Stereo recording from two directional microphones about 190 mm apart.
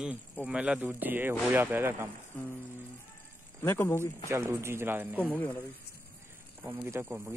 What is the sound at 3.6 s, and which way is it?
Speech, 10° left (ahead or behind).